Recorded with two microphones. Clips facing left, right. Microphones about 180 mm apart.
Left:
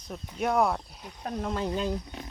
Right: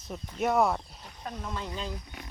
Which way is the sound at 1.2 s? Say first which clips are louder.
Left 6 dB; 50° left (ahead or behind).